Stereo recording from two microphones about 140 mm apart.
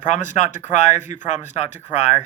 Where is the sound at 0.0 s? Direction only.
60° left (ahead or behind).